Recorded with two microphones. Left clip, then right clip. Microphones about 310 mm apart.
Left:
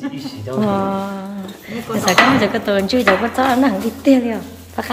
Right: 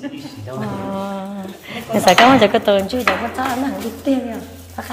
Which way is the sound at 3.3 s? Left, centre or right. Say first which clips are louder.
Left 6 dB; centre.